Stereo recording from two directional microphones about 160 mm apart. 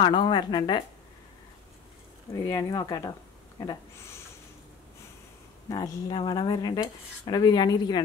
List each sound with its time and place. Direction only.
0.0 s speech: 30° left (ahead or behind)
2.3 s speech: 20° left (ahead or behind)
5.7 s speech: 30° left (ahead or behind)